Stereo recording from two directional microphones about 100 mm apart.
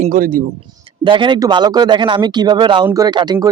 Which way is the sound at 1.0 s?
50° right (ahead or behind).